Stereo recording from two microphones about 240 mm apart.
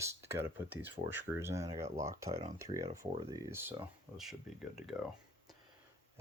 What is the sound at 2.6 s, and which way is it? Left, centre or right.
Speech, centre.